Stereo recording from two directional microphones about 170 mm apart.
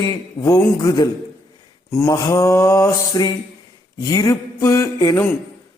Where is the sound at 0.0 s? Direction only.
20° left (ahead or behind).